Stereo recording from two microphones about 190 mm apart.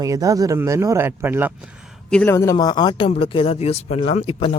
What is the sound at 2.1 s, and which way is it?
Speech, 10° left (ahead or behind).